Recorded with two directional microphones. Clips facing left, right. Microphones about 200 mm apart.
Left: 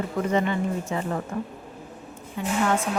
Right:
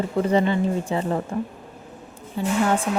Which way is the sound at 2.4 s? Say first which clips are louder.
Right 4 dB; 35° right (ahead or behind).